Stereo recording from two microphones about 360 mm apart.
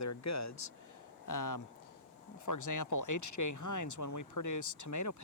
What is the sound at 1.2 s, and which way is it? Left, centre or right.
Speech, left.